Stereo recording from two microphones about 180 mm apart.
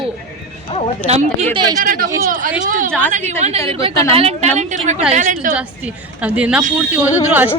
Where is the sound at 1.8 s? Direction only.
50° right (ahead or behind).